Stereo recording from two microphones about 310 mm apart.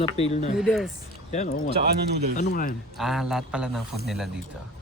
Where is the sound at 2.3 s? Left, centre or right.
Left.